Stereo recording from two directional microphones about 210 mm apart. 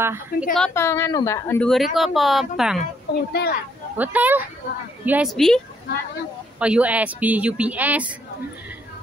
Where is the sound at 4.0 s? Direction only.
10° right (ahead or behind).